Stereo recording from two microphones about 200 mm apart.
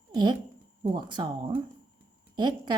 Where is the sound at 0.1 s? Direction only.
20° right (ahead or behind).